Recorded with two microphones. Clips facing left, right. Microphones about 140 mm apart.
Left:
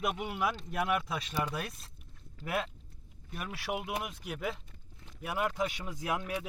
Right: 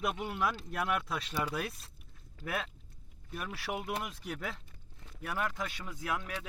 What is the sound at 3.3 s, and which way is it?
Speech, centre (ahead or behind).